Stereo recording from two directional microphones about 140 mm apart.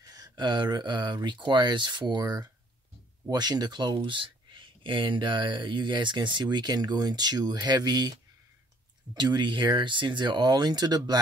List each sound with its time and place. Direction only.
0.0 s speech: 25° right (ahead or behind)